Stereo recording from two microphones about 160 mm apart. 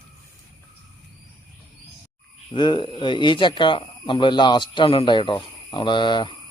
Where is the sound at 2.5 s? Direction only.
30° left (ahead or behind).